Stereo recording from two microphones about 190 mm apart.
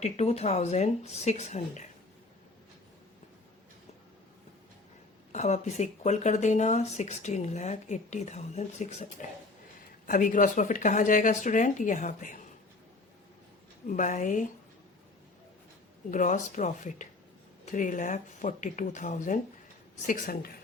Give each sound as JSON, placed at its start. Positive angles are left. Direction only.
{"t": 0.0, "sound": "speech", "side_deg": 35}
{"t": 5.3, "sound": "speech", "side_deg": 35}
{"t": 10.1, "sound": "speech", "side_deg": 45}
{"t": 13.8, "sound": "speech", "side_deg": 40}
{"t": 16.1, "sound": "speech", "side_deg": 40}